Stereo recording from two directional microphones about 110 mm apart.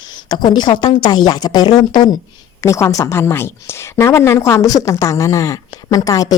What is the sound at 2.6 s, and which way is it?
A woman's voice, 25° left (ahead or behind).